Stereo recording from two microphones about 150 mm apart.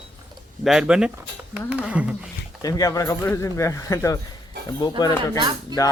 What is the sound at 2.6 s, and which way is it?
Speech, 20° left (ahead or behind).